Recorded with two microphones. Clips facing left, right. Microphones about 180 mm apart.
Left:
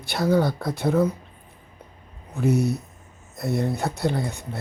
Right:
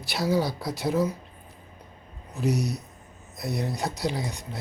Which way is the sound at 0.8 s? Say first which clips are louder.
Left 4 dB; 55° left (ahead or behind).